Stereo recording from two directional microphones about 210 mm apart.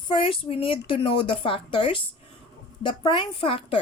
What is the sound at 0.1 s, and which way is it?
A woman's voice, 25° left (ahead or behind).